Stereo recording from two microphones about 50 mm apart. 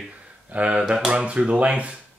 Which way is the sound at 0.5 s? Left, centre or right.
Right.